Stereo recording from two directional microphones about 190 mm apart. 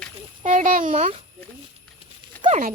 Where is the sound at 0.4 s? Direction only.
45° right (ahead or behind).